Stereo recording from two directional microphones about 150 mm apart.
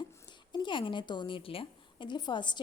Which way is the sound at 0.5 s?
30° left (ahead or behind).